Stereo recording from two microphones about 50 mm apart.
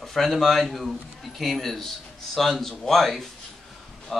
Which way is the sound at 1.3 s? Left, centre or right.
Centre.